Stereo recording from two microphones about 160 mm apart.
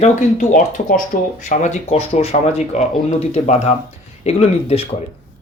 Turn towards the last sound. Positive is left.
turn(degrees=40)  # may be behind; listen again after turning